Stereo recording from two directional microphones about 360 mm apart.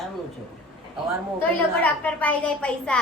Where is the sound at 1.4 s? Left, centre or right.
Centre.